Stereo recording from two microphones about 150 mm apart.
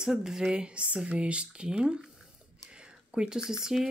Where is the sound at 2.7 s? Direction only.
5° right (ahead or behind).